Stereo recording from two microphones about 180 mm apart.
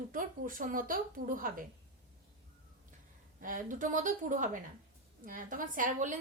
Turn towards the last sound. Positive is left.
turn(degrees=-45)  # may be behind; listen again after turning